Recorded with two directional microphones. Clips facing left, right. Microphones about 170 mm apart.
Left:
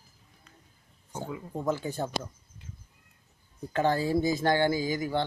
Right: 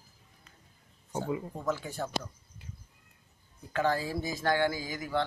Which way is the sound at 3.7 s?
30° left (ahead or behind).